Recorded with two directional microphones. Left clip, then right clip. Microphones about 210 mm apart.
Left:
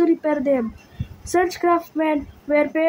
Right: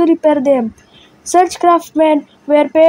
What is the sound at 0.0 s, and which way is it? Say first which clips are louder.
Speech: right 8 dB; 30° right (ahead or behind).